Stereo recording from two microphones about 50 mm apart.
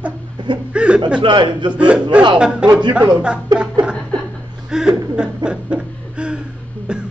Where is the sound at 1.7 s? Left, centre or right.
Right.